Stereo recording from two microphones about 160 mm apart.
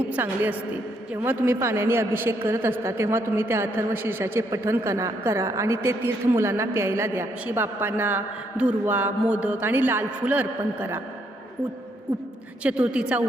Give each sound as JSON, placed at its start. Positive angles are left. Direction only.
{"t": 0.1, "sound": "a woman's voice", "side_deg": -10}
{"t": 12.6, "sound": "a woman's voice", "side_deg": -5}